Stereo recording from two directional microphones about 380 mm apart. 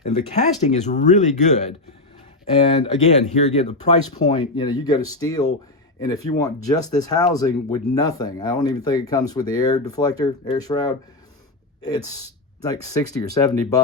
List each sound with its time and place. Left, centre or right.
0.6 s speech: centre